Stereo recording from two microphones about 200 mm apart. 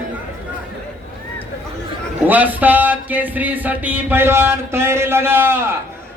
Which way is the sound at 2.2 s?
10° right (ahead or behind).